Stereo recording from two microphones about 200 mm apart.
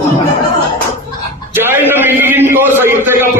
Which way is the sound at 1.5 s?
10° right (ahead or behind).